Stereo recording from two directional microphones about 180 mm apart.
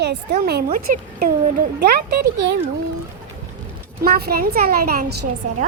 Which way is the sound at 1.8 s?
65° right (ahead or behind).